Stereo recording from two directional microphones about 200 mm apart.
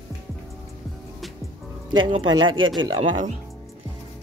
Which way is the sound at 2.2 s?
80° right.